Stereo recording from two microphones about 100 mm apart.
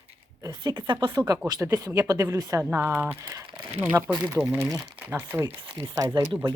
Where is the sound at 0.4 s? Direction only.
45° right (ahead or behind); by 5.5 s 25° right (ahead or behind).